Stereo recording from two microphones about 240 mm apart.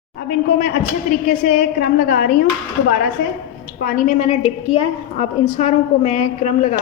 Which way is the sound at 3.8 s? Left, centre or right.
Left.